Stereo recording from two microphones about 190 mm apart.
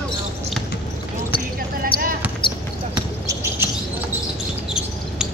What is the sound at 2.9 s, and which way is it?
Basketball bounce, 15° right (ahead or behind).